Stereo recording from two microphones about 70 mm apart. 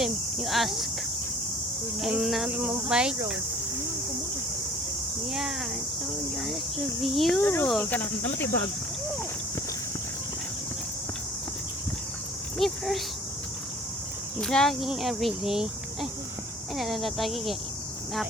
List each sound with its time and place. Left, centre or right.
0.0 s speech: centre
2.0 s speech: centre
2.5 s speech: right
2.9 s speech: centre
5.3 s speech: centre
7.4 s speech: left
12.5 s speech: centre
14.4 s speech: centre